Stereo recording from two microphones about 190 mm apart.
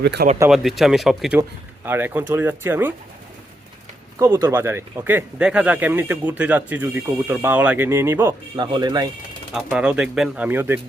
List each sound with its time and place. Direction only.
0.0 s speech: 60° right (ahead or behind)
0.5 s speech: centre (ahead or behind)
4.2 s speech: 15° right (ahead or behind)
8.5 s speech: 20° right (ahead or behind)
9.6 s speech: 5° right (ahead or behind)